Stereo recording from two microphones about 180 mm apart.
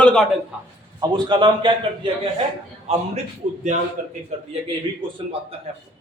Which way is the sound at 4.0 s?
50° right (ahead or behind).